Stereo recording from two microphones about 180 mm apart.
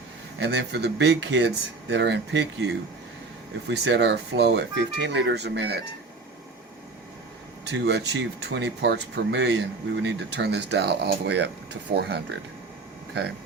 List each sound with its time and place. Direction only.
0.3 s speech: 70° right (ahead or behind)
7.7 s speech: 70° right (ahead or behind)